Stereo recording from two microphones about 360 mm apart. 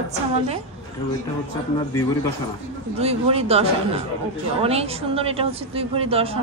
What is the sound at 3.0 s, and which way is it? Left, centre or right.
A woman's voice, centre.